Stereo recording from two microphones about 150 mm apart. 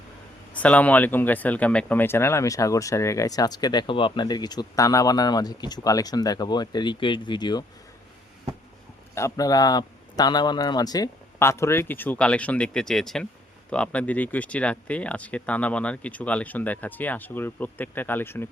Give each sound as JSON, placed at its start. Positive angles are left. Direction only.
{"t": 0.5, "sound": "speech", "side_deg": 10}
{"t": 9.1, "sound": "speech", "side_deg": 20}